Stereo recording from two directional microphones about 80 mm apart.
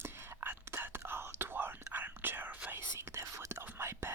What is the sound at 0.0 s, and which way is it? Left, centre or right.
Whispering, right.